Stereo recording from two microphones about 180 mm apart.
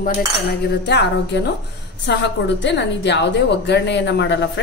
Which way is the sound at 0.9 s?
75° left (ahead or behind).